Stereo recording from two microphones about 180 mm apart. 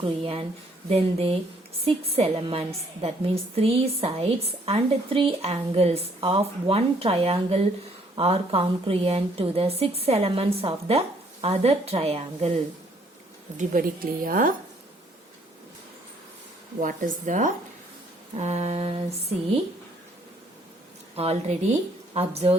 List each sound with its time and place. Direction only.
0.0 s a woman's voice: 30° right (ahead or behind)
13.6 s a woman's voice: 50° right (ahead or behind)
16.8 s a woman's voice: 45° right (ahead or behind)
21.2 s a woman's voice: 35° right (ahead or behind)